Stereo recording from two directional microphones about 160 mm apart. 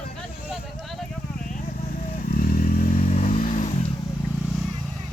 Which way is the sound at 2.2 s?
65° left (ahead or behind).